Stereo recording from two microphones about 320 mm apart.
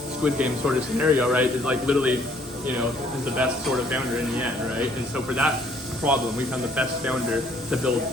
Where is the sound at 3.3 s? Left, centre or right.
Centre.